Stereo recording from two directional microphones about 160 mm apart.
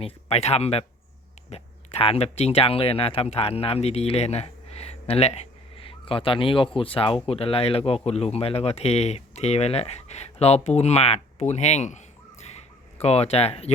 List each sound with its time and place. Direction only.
0.0 s speech: 40° left (ahead or behind)